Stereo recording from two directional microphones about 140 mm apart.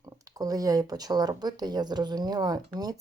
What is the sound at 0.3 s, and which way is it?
Speech, 25° right (ahead or behind).